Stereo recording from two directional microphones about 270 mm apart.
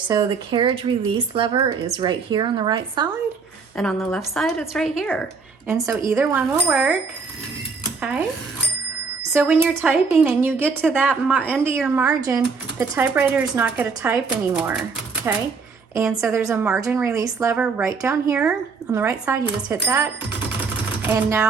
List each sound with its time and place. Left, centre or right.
0.1 s a woman's voice: centre
3.8 s a woman's voice: centre
5.6 s a woman's voice: centre
9.3 s a woman's voice: centre
21.1 s a woman's voice: centre